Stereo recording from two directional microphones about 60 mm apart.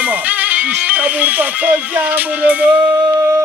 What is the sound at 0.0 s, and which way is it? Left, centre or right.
Music, right.